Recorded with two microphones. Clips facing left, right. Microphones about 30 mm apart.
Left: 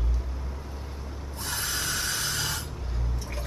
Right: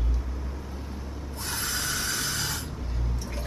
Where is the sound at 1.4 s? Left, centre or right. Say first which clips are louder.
Even; centre.